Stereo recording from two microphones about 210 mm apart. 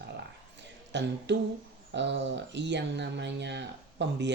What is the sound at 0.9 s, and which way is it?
Speech, 55° right (ahead or behind).